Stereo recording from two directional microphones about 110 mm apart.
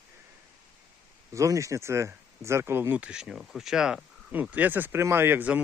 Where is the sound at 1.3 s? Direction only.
30° right (ahead or behind).